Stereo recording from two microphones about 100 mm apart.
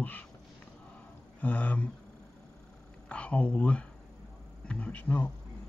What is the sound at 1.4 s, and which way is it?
Speech, 15° left (ahead or behind).